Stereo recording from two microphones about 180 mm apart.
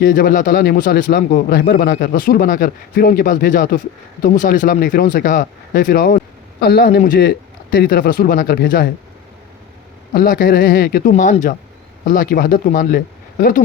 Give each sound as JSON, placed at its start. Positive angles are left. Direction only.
{"t": 0.0, "sound": "a man's voice", "side_deg": 55}
{"t": 10.2, "sound": "a man's voice", "side_deg": 50}
{"t": 11.1, "sound": "a man's voice", "side_deg": 45}